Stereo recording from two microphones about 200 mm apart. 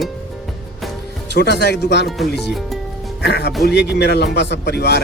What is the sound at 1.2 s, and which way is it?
A man's voice, 55° left (ahead or behind).